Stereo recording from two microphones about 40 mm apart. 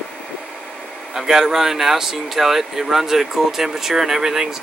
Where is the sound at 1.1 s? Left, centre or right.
Centre.